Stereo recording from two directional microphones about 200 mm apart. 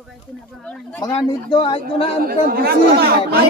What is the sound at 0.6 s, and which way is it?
Speech, 5° left (ahead or behind).